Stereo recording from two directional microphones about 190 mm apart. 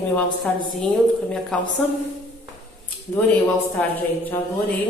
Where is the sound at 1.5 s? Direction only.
5° left (ahead or behind).